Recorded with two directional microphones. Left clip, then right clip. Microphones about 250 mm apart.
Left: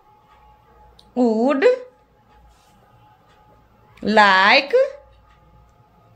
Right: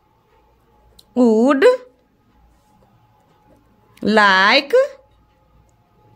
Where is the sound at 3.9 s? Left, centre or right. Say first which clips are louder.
Right 1 dB; right.